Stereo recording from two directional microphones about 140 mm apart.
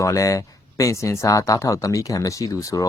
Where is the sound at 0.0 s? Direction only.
20° left (ahead or behind).